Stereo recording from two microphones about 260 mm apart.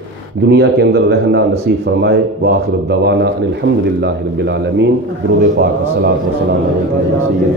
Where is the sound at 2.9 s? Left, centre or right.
Right.